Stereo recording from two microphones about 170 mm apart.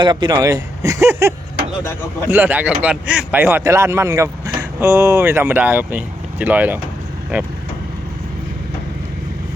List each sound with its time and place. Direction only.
0.0 s speech: 25° right (ahead or behind)
2.3 s speech: 10° right (ahead or behind)